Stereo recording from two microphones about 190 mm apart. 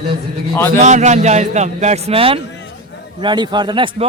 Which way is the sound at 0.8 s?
40° right (ahead or behind).